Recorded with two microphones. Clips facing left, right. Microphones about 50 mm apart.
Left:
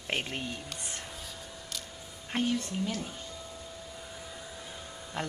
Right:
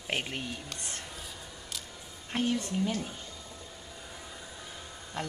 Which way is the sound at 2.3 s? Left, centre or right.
Centre.